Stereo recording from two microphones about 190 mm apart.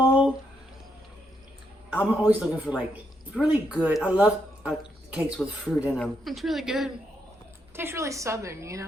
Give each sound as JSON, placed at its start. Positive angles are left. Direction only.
{"t": 0.0, "sound": "a sound", "side_deg": -5}
{"t": 1.9, "sound": "speech", "side_deg": -5}
{"t": 7.8, "sound": "a woman's voice", "side_deg": -15}